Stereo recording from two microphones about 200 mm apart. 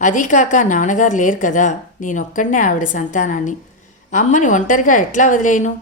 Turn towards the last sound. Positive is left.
turn(degrees=40)  # may be behind; listen again after turning